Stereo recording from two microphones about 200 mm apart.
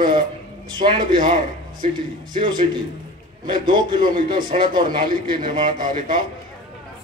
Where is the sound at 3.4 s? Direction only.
25° right (ahead or behind).